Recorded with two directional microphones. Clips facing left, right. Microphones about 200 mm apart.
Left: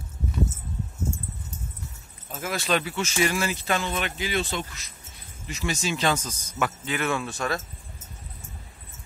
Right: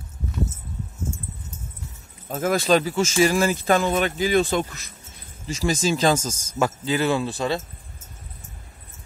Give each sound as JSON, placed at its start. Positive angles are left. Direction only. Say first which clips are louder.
{"t": 2.2, "sound": "speech", "louder": "right 8 dB", "side_deg": -50}
{"t": 5.6, "sound": "speech", "louder": "right 6 dB", "side_deg": -35}